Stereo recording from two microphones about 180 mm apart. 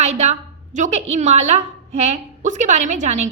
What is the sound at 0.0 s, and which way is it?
A woman's voice, 35° right (ahead or behind).